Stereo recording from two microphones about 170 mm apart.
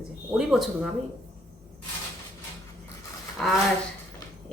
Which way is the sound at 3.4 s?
5° left (ahead or behind).